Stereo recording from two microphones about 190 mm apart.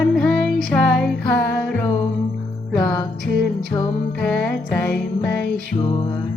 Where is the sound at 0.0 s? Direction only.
Centre (ahead or behind).